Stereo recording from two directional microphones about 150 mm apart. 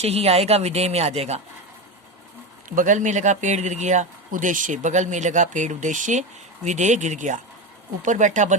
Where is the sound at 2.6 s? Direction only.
60° right (ahead or behind).